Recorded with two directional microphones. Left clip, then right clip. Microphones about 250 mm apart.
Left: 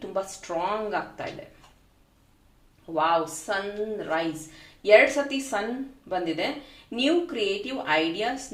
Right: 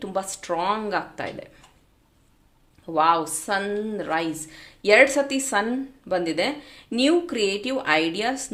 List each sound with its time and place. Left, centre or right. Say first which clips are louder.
0.0 s speech: right 2 dB; right
2.9 s speech: right 4 dB; right